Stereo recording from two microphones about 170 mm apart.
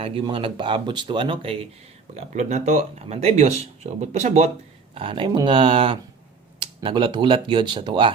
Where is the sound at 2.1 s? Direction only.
40° right (ahead or behind).